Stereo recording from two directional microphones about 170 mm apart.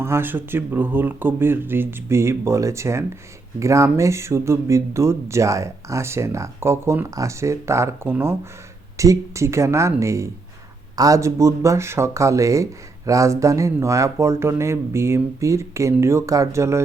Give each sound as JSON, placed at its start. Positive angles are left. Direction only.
{"t": 0.0, "sound": "speech", "side_deg": -15}